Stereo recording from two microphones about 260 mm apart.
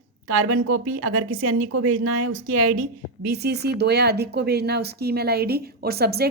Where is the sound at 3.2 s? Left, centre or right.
Right.